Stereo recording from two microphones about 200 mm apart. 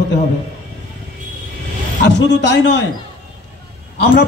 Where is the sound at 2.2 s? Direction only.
60° left (ahead or behind).